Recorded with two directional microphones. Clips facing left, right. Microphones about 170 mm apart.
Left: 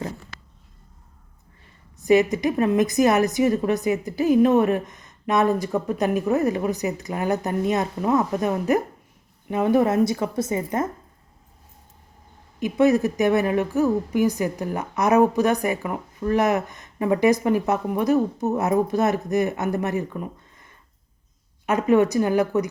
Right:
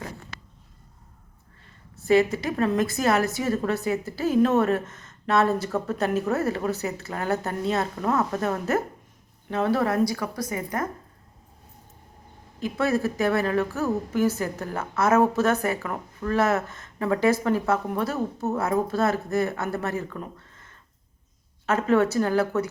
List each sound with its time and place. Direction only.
2.0 s a woman's voice: 20° left (ahead or behind)
12.5 s a woman's voice: 15° left (ahead or behind)